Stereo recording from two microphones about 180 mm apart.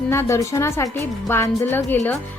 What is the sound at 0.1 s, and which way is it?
A woman's voice, 15° left (ahead or behind).